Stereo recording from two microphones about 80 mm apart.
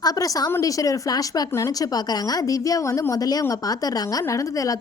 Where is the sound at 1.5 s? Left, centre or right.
Left.